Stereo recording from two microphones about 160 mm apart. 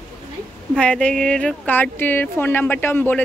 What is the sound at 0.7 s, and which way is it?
Speech, 5° left (ahead or behind).